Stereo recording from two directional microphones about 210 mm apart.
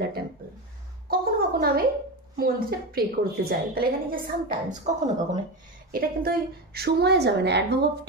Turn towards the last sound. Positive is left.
turn(degrees=-55)  # may be behind; listen again after turning